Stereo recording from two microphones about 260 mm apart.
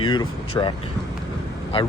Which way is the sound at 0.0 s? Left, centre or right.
Centre.